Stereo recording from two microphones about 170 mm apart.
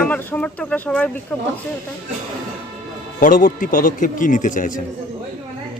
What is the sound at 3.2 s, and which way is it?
Speech, 50° left (ahead or behind).